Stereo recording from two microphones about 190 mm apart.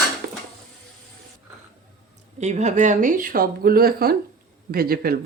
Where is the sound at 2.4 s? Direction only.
35° right (ahead or behind); by 5.1 s 50° right (ahead or behind).